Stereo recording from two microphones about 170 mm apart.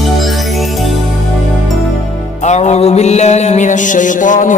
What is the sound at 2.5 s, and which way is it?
Mantra, 40° left (ahead or behind).